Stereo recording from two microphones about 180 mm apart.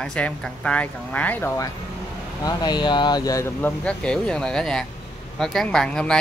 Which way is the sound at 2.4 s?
25° left (ahead or behind).